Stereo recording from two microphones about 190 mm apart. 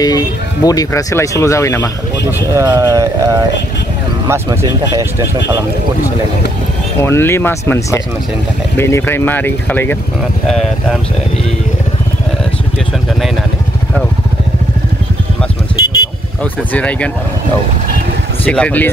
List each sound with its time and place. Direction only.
0.0 s speech: 20° left (ahead or behind)
2.5 s speech: 15° right (ahead or behind)
7.0 s speech: 15° left (ahead or behind)
16.7 s speech: 5° left (ahead or behind)
18.4 s speech: 5° left (ahead or behind)